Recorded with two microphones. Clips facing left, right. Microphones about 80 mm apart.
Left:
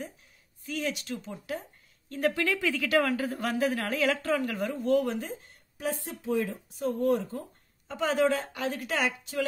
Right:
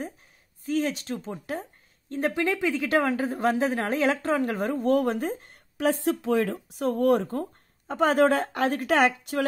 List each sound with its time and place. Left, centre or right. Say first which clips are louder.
0.7 s a woman's voice: right 6 dB; right
2.0 s a woman's voice: right 2 dB; right
5.8 s speech: right 9 dB; right